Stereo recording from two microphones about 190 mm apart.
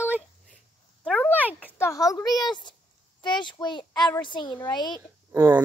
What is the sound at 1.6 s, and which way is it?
A child's voice, 10° left (ahead or behind).